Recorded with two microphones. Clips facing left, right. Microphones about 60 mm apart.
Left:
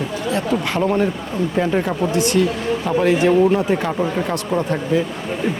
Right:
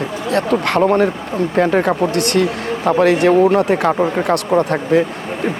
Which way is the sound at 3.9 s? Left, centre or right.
Right.